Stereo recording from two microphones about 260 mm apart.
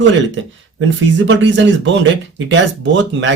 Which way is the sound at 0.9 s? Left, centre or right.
Right.